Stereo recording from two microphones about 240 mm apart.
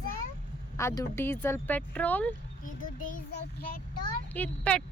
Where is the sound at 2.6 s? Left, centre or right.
Left.